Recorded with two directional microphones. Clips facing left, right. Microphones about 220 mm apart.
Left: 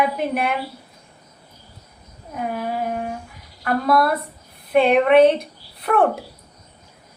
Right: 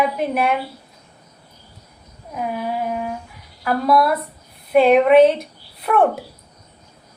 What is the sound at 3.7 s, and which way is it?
A woman's voice, centre (ahead or behind).